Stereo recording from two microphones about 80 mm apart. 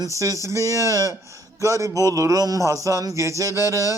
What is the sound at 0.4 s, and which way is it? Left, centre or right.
A man's voice, right.